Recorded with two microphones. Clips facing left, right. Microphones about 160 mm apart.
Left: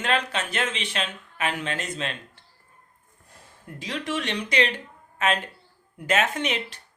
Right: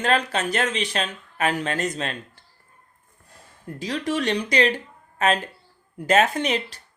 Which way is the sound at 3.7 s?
35° right (ahead or behind).